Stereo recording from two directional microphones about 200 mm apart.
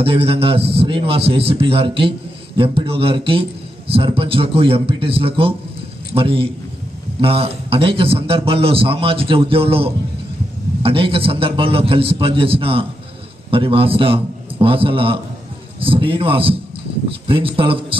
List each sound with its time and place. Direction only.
0.0 s a man's voice: 30° right (ahead or behind)